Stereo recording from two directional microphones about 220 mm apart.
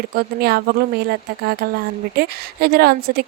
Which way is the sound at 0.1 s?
45° right (ahead or behind).